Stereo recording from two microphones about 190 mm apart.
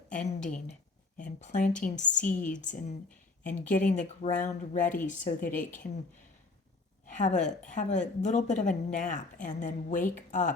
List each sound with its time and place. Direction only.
0.1 s a woman's voice: 45° left (ahead or behind)
7.0 s a woman's voice: 40° left (ahead or behind)